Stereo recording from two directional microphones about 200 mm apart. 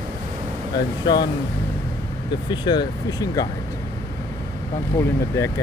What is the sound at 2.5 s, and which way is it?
Speech, 20° left (ahead or behind).